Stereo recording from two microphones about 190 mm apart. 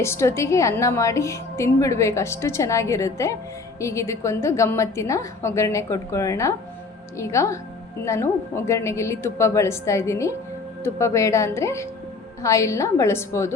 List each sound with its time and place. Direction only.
0.0 s a woman's voice: 15° left (ahead or behind)